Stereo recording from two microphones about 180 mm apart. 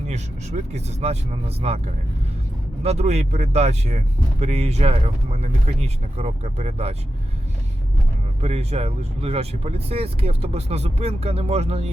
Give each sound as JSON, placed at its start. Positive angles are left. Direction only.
{"t": 0.1, "sound": "speech", "side_deg": -40}
{"t": 2.8, "sound": "speech", "side_deg": -35}
{"t": 8.4, "sound": "speech", "side_deg": -35}